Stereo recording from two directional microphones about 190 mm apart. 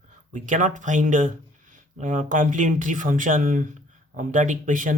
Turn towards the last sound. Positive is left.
turn(degrees=-45)  # may be behind; listen again after turning